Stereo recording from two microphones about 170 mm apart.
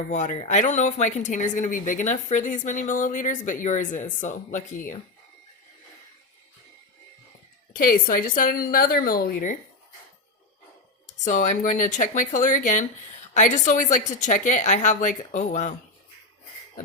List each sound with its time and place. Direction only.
0.1 s speech: 45° left (ahead or behind)
7.7 s a woman's voice: 55° left (ahead or behind)
11.0 s speech: 45° left (ahead or behind)